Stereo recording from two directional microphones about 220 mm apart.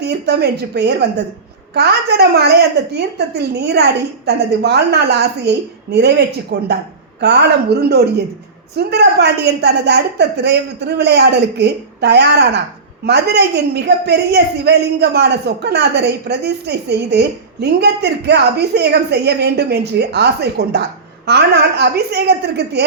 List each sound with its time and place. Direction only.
0.0 s a man's voice: 50° right (ahead or behind)